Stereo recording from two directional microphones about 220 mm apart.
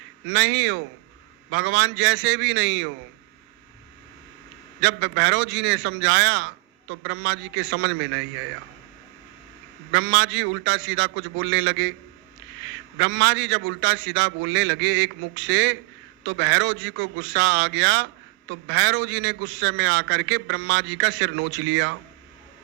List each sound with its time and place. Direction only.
0.3 s a man's voice: 55° right (ahead or behind)
4.8 s a man's voice: 55° right (ahead or behind)
9.9 s a man's voice: 55° right (ahead or behind)